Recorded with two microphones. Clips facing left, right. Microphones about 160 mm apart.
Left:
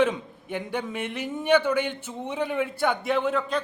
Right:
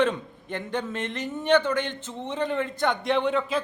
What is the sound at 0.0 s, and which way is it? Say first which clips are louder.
A man's voice: left 1 dB; 10° left (ahead or behind).